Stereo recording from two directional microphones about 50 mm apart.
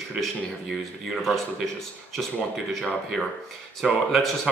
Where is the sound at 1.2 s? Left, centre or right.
Centre.